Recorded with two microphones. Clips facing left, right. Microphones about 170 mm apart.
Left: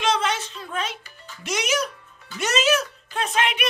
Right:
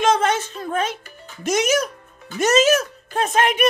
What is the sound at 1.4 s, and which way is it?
Speech, 45° right (ahead or behind).